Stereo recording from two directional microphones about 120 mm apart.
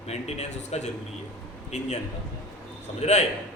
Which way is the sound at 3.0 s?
65° left (ahead or behind).